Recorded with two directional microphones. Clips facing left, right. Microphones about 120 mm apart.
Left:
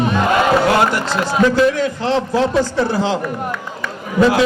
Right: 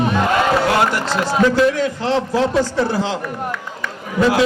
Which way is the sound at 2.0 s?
20° left (ahead or behind).